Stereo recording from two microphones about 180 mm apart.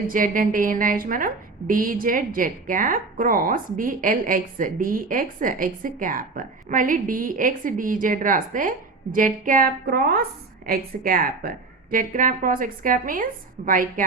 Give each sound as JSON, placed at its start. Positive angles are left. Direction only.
{"t": 0.1, "sound": "a woman's voice", "side_deg": -50}